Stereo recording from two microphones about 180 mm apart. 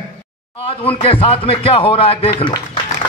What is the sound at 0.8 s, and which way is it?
Speech, 30° left (ahead or behind).